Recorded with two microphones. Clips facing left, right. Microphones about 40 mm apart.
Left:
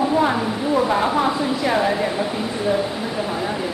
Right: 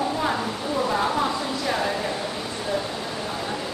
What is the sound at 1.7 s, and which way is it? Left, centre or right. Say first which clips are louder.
Speech: left 6 dB; centre.